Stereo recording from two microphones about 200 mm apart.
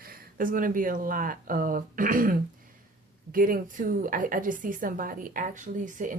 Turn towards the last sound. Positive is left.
turn(degrees=-40)  # may be behind; listen again after turning